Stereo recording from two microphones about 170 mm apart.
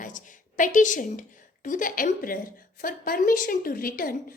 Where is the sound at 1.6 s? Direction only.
50° left (ahead or behind).